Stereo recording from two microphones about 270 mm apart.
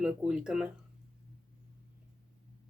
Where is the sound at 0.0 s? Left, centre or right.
Centre.